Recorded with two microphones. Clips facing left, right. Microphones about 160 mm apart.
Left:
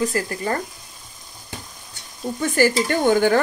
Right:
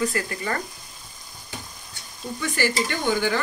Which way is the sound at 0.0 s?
35° left (ahead or behind).